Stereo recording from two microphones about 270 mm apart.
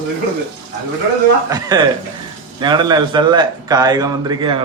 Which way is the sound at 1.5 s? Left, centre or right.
Centre.